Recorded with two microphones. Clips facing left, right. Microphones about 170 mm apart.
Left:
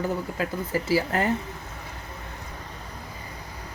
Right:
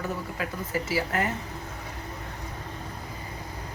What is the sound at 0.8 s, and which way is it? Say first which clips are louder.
Speech: left 5 dB; 30° left (ahead or behind).